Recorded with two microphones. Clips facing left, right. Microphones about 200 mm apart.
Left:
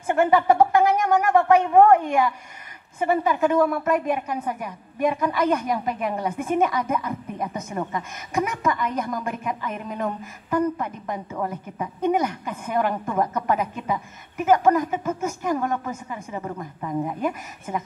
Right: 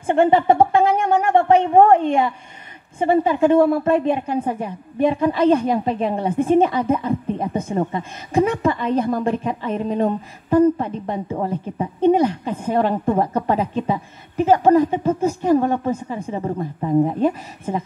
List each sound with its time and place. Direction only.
0.0 s a woman's voice: 30° right (ahead or behind)